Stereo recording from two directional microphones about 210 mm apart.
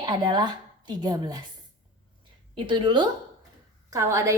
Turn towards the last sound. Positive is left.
turn(degrees=-15)  # may be behind; listen again after turning